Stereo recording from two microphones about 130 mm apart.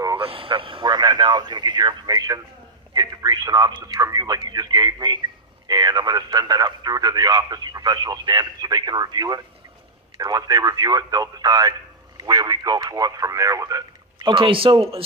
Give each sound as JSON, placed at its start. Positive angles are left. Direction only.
{"t": 0.2, "sound": "speech", "side_deg": -45}